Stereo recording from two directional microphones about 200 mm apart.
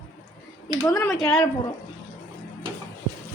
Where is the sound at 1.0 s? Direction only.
5° left (ahead or behind).